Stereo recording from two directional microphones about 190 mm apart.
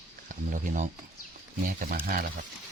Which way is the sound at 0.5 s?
45° right (ahead or behind).